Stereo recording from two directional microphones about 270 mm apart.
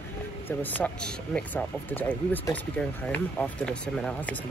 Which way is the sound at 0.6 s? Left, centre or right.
Centre.